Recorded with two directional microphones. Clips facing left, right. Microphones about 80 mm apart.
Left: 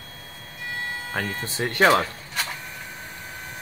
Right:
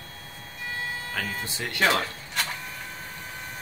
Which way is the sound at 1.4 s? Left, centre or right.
Left.